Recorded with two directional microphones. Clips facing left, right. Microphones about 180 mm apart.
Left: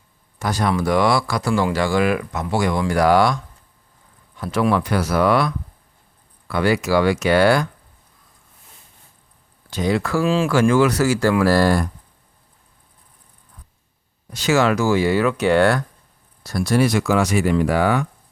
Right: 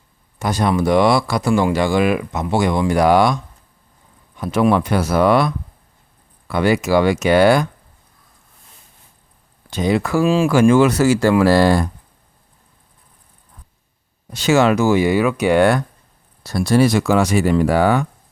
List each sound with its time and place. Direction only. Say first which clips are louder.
0.3 s speech: right 3 dB; 20° right (ahead or behind)
9.6 s speech: right 2 dB; 20° right (ahead or behind)
14.3 s speech: right 3 dB; 25° right (ahead or behind)
16.4 s speech: right 3 dB; 30° right (ahead or behind)